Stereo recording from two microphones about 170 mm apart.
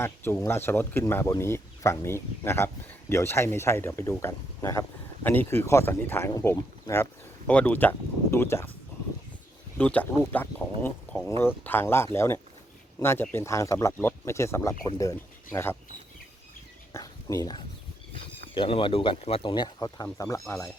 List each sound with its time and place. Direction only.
0.0 s speech: 15° left (ahead or behind)
9.7 s speech: 10° left (ahead or behind)
16.9 s a sound: 20° left (ahead or behind)
18.5 s speech: 30° left (ahead or behind)